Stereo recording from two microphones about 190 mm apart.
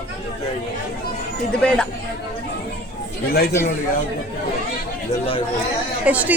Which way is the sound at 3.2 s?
55° left (ahead or behind).